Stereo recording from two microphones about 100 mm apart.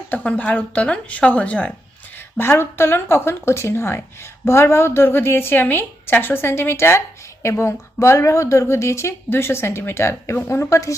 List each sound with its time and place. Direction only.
0.1 s speech: 15° left (ahead or behind)
2.1 s a woman's voice: 25° left (ahead or behind)